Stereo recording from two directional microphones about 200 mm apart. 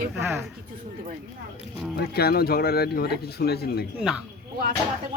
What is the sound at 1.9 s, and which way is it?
Speech, 50° left (ahead or behind).